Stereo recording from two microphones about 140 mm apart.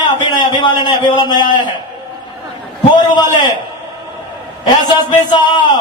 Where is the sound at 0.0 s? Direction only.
30° left (ahead or behind).